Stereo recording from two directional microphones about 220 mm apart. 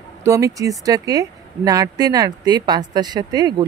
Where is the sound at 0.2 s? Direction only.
15° right (ahead or behind).